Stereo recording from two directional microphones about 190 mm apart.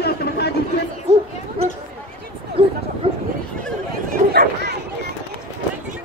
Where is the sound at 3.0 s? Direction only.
30° right (ahead or behind).